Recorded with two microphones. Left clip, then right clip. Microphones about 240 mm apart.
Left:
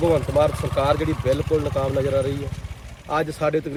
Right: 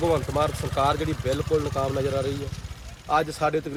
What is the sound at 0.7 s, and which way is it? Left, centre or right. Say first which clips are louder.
Speech: even; centre.